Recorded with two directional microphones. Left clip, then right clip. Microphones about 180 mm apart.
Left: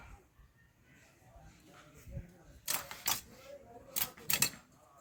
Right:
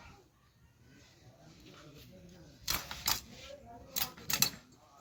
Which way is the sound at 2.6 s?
15° left (ahead or behind).